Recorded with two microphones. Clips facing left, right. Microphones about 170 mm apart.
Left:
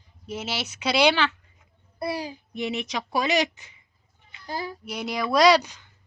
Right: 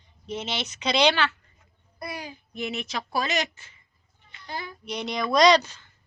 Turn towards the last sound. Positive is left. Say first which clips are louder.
# even
turn(degrees=15)  # may be behind; listen again after turning